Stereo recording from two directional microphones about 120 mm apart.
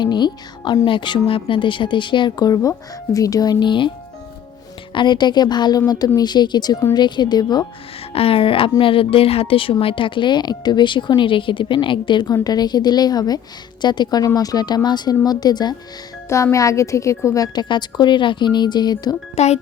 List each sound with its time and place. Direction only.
0.0 s a woman's voice: 40° left (ahead or behind)
4.9 s a woman's voice: 40° left (ahead or behind)
8.1 s a woman's voice: 55° left (ahead or behind); by 15.7 s 35° left (ahead or behind)
16.3 s a woman's voice: 25° left (ahead or behind)
19.4 s a child's voice: 65° left (ahead or behind)